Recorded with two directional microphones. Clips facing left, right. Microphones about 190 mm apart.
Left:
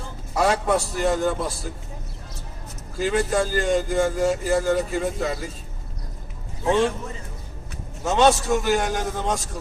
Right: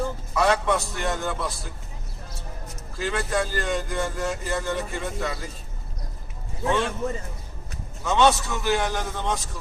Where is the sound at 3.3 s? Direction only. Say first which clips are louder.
Left 5 dB; 45° left (ahead or behind).